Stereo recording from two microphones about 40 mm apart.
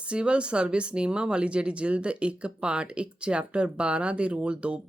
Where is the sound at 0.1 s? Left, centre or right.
Right.